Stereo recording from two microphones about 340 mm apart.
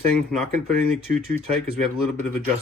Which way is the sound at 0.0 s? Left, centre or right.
Centre.